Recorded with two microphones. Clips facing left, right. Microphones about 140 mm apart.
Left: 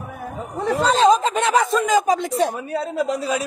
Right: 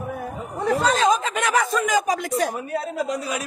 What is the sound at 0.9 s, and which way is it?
Speech, 30° left (ahead or behind).